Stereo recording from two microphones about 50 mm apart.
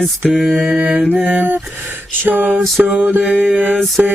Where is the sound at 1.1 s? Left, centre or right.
Right.